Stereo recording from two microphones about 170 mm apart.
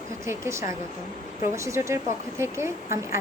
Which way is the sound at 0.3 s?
15° right (ahead or behind).